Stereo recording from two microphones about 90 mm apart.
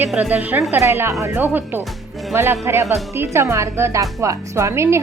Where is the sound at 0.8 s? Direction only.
30° right (ahead or behind).